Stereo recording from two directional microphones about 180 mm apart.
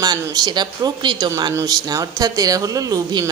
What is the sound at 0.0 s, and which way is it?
Speech, 20° right (ahead or behind).